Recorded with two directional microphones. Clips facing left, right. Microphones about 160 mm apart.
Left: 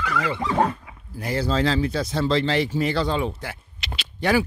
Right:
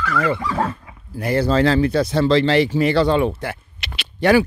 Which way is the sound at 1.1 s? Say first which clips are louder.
Right 6 dB; 60° right (ahead or behind).